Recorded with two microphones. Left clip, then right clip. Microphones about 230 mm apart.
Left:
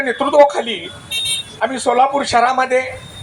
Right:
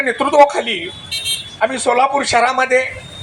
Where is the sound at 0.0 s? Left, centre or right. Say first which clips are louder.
Even; right.